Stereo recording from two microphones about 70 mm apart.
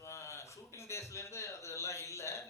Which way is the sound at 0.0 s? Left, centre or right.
Left.